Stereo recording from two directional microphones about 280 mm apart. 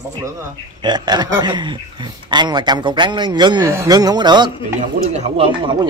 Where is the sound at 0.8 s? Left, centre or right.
Centre.